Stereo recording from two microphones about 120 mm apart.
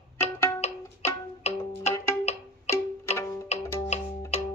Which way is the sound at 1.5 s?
65° left (ahead or behind).